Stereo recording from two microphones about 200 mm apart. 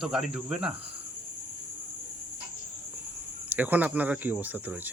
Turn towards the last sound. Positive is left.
turn(degrees=-10)  # may be behind; listen again after turning